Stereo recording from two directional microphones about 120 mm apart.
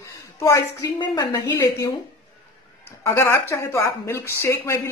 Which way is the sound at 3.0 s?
25° left (ahead or behind).